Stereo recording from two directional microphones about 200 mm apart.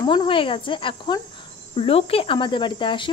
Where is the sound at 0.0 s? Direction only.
25° left (ahead or behind).